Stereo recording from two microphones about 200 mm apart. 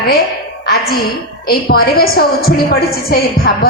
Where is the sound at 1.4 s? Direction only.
50° left (ahead or behind).